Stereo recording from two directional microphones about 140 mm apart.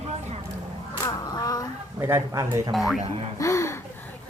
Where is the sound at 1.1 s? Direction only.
25° left (ahead or behind).